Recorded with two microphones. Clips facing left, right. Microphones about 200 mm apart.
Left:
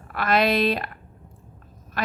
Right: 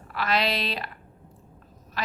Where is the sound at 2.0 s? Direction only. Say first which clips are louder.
Left 5 dB; 50° left (ahead or behind).